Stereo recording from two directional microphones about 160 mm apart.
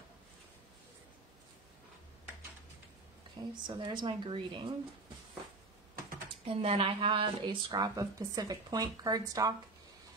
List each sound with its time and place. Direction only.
3.6 s a woman's voice: 30° right (ahead or behind)
6.4 s a woman's voice: 40° right (ahead or behind)